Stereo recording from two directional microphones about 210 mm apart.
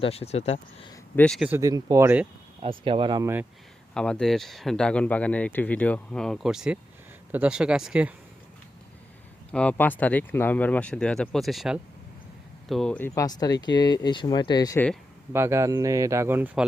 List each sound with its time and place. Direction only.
0.0 s speech: 30° left (ahead or behind)
1.1 s speech: 5° left (ahead or behind)
1.5 s speech: 15° right (ahead or behind)
2.6 s speech: 25° right (ahead or behind)
3.9 s speech: 5° left (ahead or behind)
9.5 s speech: 5° left (ahead or behind)
15.3 s speech: 10° right (ahead or behind)